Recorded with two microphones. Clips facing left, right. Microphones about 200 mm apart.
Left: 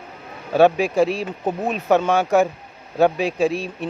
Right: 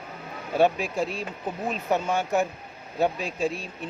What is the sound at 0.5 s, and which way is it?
Speech, 90° left.